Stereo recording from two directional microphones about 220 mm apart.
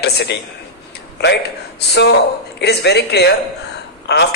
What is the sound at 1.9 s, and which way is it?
A man's voice, 50° left (ahead or behind).